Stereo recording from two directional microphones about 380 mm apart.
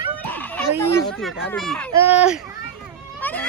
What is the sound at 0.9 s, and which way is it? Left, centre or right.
Speech, centre.